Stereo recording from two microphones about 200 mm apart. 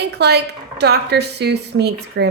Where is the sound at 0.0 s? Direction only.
55° right (ahead or behind).